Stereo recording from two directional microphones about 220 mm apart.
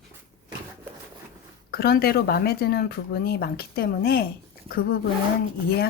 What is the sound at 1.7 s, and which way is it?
Speech, 45° left (ahead or behind).